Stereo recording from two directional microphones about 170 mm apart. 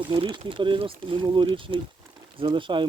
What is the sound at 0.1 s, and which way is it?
Speech, 30° right (ahead or behind).